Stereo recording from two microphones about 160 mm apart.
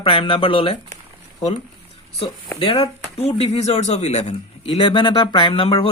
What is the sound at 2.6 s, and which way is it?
Speech, 35° left (ahead or behind).